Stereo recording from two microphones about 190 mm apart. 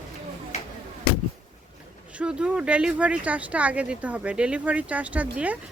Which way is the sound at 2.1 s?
5° right (ahead or behind).